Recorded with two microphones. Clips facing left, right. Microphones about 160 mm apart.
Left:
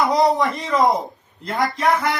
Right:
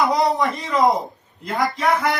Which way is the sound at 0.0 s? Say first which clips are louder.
Left 1 dB; centre (ahead or behind).